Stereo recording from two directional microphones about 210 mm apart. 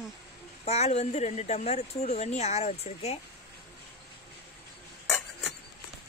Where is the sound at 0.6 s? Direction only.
30° left (ahead or behind).